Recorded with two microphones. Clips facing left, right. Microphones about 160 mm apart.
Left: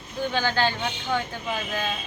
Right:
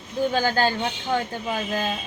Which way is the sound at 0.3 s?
40° right (ahead or behind).